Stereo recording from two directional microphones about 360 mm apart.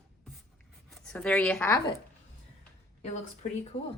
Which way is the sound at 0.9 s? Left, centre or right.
Centre.